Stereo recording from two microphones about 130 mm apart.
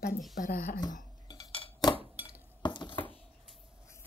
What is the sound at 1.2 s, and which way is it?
Cutlery, 45° left (ahead or behind).